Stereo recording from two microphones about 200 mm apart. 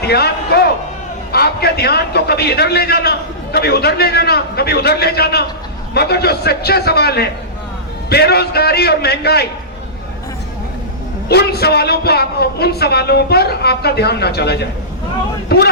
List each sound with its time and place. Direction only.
0.1 s a man's voice: 55° left (ahead or behind)
11.3 s a man's voice: 55° left (ahead or behind)